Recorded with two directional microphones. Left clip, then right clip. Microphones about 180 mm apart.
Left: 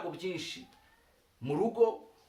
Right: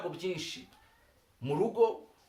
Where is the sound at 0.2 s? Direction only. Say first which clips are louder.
Right 1 dB; 10° left (ahead or behind).